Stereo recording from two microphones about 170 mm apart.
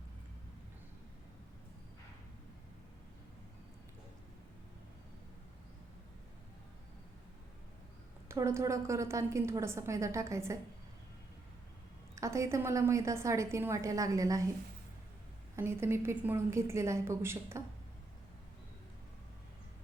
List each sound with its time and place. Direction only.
8.3 s a woman's voice: 15° right (ahead or behind)
12.1 s a woman's voice: 20° right (ahead or behind)
15.5 s a woman's voice: 15° right (ahead or behind)